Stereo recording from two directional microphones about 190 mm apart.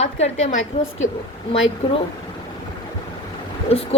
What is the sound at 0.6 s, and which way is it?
Speech, 90° left.